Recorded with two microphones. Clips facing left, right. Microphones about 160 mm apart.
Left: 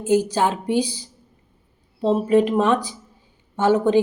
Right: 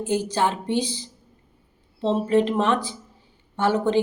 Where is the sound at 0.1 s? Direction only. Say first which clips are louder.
Left 5 dB; 10° left (ahead or behind).